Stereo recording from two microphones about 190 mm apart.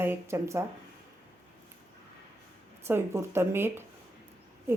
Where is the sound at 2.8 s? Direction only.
15° right (ahead or behind).